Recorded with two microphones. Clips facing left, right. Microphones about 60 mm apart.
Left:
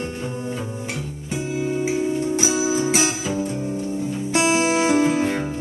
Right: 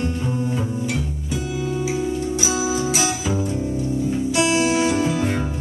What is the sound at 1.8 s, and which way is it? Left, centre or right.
Music, left.